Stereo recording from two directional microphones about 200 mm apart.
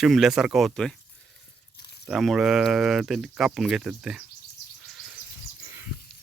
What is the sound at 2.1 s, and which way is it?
Speech, centre (ahead or behind).